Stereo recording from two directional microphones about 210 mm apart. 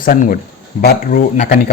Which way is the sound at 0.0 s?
40° left (ahead or behind).